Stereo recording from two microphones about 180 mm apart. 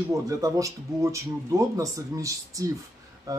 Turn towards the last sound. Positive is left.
turn(degrees=-20)  # may be behind; listen again after turning